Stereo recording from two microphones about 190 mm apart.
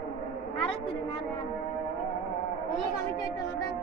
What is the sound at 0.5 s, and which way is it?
Speech, 30° left (ahead or behind).